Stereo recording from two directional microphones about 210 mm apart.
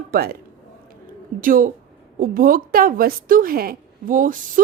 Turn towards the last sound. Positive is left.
turn(degrees=-40)  # may be behind; listen again after turning